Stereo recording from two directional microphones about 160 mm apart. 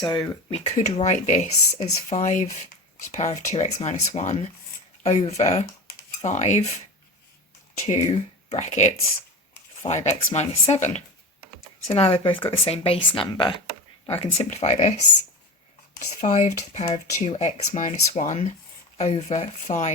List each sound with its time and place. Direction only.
0.0 s speech: 30° left (ahead or behind)
0.5 s speech: 40° left (ahead or behind)
8.4 s speech: 45° left (ahead or behind)